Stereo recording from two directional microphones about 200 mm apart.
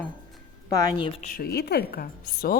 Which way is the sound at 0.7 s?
20° left (ahead or behind).